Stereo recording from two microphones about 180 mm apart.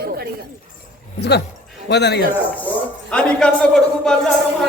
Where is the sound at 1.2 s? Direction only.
70° left (ahead or behind).